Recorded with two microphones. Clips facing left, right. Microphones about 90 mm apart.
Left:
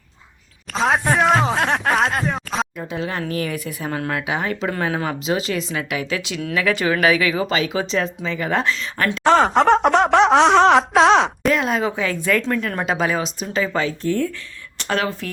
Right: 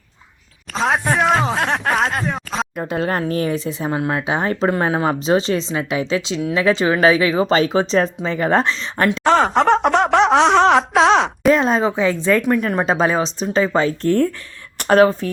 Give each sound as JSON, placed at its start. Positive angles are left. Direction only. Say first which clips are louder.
{"t": 0.7, "sound": "speech", "louder": "even", "side_deg": 0}
{"t": 2.7, "sound": "speech", "louder": "right 5 dB", "side_deg": -50}
{"t": 9.2, "sound": "wail", "louder": "left 1 dB", "side_deg": 0}
{"t": 11.5, "sound": "speech", "louder": "right 4 dB", "side_deg": -35}
{"t": 12.8, "sound": "speech", "louder": "right 4 dB", "side_deg": -35}
{"t": 14.0, "sound": "speech", "louder": "right 5 dB", "side_deg": -55}
{"t": 14.8, "sound": "speech", "louder": "right 10 dB", "side_deg": -45}